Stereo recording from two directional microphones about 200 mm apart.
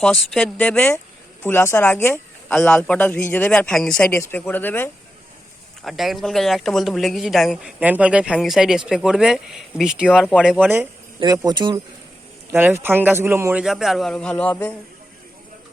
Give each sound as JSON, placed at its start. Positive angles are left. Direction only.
{"t": 0.0, "sound": "speech", "side_deg": 5}
{"t": 5.8, "sound": "a man's voice", "side_deg": 0}
{"t": 11.2, "sound": "speech", "side_deg": -20}
{"t": 12.5, "sound": "a man's voice", "side_deg": -10}